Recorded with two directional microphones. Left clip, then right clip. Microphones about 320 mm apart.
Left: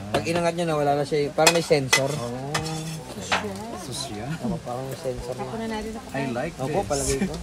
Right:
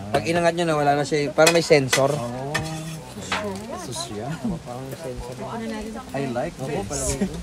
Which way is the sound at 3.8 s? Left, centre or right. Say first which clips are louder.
Right 2 dB; centre.